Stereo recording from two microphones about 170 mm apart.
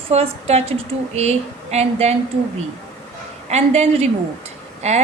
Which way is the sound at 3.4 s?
40° right (ahead or behind).